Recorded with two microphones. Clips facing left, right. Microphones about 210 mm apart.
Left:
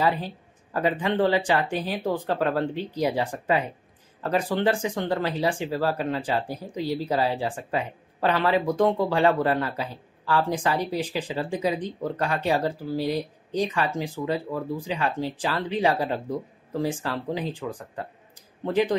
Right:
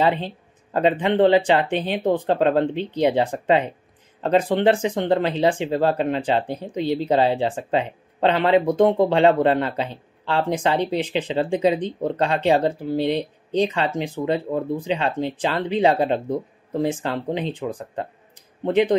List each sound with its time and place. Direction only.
0.0 s speech: 25° right (ahead or behind)